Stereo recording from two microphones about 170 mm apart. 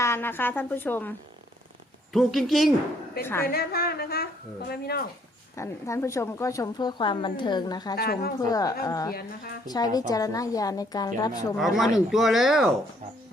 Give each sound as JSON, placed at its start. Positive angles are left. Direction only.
{"t": 0.0, "sound": "a woman's voice", "side_deg": 15}
{"t": 2.1, "sound": "speech", "side_deg": 0}
{"t": 3.4, "sound": "a woman's voice", "side_deg": 65}
{"t": 5.5, "sound": "a woman's voice", "side_deg": 15}
{"t": 7.9, "sound": "a woman's voice", "side_deg": 65}
{"t": 8.4, "sound": "a woman's voice", "side_deg": 20}
{"t": 11.5, "sound": "speech", "side_deg": 0}